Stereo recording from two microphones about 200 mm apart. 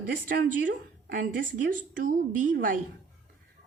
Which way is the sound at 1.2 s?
40° right (ahead or behind).